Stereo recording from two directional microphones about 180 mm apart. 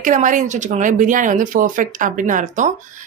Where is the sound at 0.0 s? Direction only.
45° right (ahead or behind).